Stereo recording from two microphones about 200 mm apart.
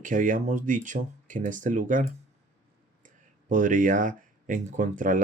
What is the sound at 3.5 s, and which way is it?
Speech, 40° right (ahead or behind).